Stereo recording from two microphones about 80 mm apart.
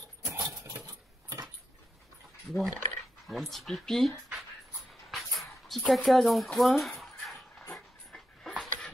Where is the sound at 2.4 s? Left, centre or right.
Centre.